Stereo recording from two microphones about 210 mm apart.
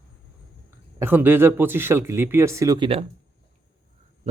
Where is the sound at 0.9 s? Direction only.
10° right (ahead or behind); by 3.1 s 25° right (ahead or behind).